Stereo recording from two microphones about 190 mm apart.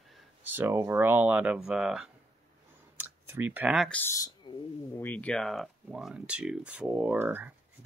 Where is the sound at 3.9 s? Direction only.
15° left (ahead or behind).